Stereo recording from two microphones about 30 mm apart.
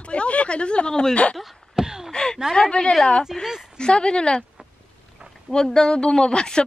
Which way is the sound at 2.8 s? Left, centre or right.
Left.